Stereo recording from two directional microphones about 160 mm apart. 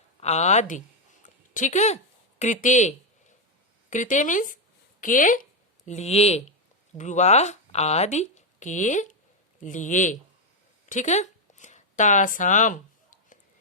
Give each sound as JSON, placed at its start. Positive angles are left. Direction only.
{"t": 0.2, "sound": "speech", "side_deg": 45}